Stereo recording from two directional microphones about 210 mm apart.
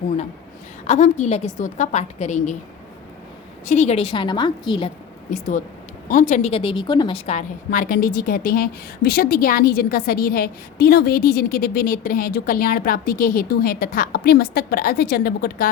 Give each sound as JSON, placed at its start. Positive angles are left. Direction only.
{"t": 0.9, "sound": "a woman's voice", "side_deg": 35}
{"t": 3.7, "sound": "a woman's voice", "side_deg": 30}
{"t": 5.3, "sound": "a woman's voice", "side_deg": 35}
{"t": 7.3, "sound": "a woman's voice", "side_deg": 35}